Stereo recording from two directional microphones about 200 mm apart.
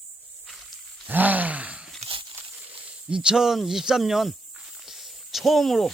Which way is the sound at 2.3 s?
5° right (ahead or behind).